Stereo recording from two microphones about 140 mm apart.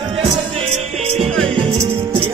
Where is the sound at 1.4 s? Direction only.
40° right (ahead or behind).